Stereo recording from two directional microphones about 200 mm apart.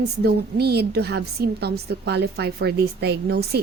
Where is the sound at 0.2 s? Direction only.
55° right (ahead or behind).